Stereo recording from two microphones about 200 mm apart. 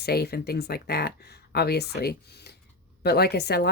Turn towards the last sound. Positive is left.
turn(degrees=55)  # may be behind; listen again after turning